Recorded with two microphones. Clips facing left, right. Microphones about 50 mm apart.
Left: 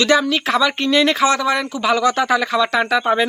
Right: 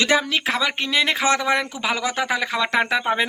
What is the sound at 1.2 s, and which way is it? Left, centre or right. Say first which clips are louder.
Speech: left 3 dB; right.